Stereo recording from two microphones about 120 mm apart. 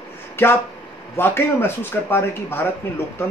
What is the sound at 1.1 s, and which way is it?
Speech, 20° left (ahead or behind).